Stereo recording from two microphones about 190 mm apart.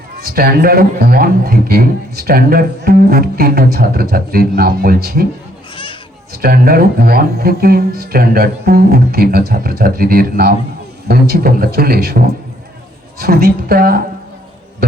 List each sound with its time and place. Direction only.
0.2 s a man's voice: 50° right (ahead or behind)
5.7 s children playing: 25° left (ahead or behind)
6.3 s a man's voice: 50° right (ahead or behind)